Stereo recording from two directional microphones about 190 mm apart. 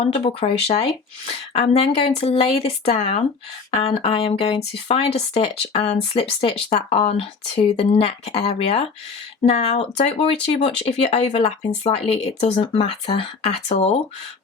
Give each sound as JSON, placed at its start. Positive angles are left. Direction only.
{"t": 0.0, "sound": "speech", "side_deg": 30}